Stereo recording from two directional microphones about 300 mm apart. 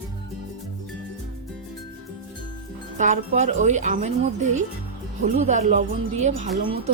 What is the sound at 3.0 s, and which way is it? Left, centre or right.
A woman's voice, right.